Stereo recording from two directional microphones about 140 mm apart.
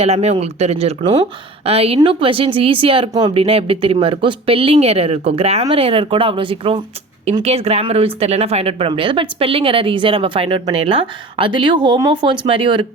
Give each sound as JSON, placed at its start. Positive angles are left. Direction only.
{"t": 0.0, "sound": "speech", "side_deg": -50}